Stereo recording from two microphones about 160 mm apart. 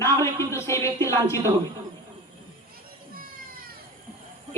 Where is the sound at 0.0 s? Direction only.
15° left (ahead or behind).